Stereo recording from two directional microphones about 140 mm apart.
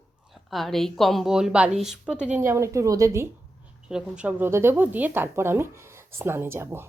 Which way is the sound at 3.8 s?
5° right (ahead or behind).